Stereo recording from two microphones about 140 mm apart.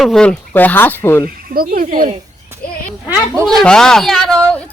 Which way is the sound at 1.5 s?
90° right.